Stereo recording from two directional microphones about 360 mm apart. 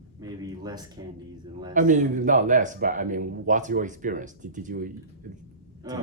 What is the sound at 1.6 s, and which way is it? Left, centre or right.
A man's voice, right.